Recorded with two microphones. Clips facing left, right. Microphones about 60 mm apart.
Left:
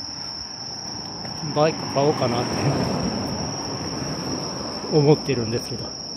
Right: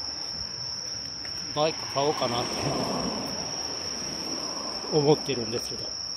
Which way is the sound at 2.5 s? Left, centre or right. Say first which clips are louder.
Left 6 dB; left.